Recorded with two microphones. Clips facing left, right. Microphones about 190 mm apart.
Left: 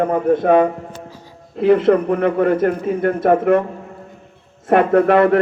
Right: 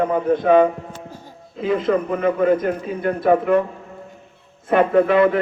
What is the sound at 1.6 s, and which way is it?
A man's voice, 70° left (ahead or behind).